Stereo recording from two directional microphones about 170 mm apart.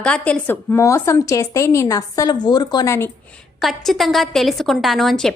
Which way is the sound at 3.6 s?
Centre (ahead or behind).